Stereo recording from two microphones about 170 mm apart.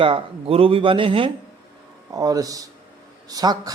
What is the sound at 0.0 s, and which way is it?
A man's voice, 30° right (ahead or behind).